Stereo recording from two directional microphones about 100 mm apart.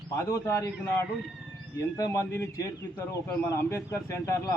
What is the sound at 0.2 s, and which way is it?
A man's voice, 30° left (ahead or behind).